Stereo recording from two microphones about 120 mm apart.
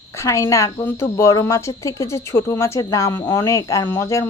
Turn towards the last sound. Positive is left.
turn(degrees=25)  # may be behind; listen again after turning